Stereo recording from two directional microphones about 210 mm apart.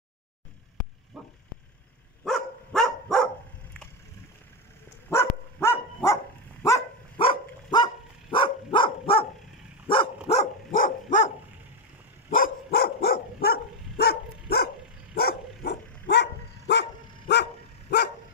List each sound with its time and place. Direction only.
1.1 s vehicle: centre (ahead or behind)
2.2 s dog: centre (ahead or behind)
5.1 s dog: 10° left (ahead or behind); by 11.3 s 35° left (ahead or behind)
12.4 s dog: 45° left (ahead or behind)